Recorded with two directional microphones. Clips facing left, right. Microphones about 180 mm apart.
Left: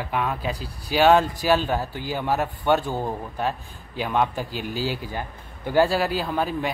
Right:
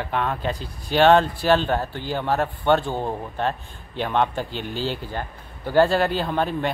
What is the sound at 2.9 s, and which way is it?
Speech, 20° right (ahead or behind).